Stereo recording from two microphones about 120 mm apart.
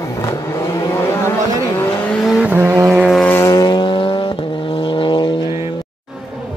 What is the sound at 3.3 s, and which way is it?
Vehicle, 25° left (ahead or behind).